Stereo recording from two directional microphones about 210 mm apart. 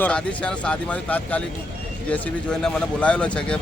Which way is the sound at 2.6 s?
5° left (ahead or behind).